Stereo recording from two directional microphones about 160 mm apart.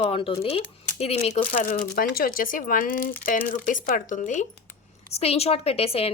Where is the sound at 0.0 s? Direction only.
35° left (ahead or behind); by 4.4 s 50° left (ahead or behind).